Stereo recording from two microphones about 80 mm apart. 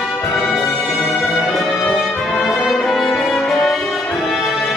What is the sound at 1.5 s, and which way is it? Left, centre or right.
Brass instrument, centre.